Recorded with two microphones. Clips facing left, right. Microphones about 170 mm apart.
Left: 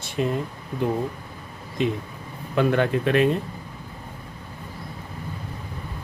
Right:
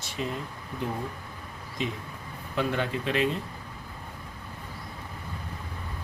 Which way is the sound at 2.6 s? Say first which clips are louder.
Left 8 dB; 60° left (ahead or behind).